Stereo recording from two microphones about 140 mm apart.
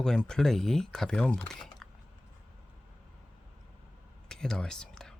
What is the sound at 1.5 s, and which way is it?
Typing, 5° left (ahead or behind).